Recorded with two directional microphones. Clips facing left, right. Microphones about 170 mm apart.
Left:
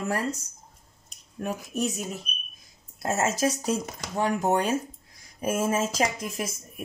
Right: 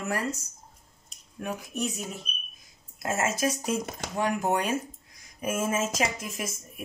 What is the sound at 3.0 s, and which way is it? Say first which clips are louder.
Speech: left 2 dB; 30° left (ahead or behind).